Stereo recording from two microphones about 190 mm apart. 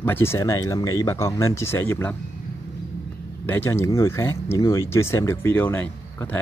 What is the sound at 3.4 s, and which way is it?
Speech, 10° left (ahead or behind).